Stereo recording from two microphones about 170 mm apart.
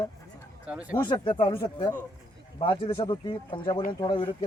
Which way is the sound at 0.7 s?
10° right (ahead or behind).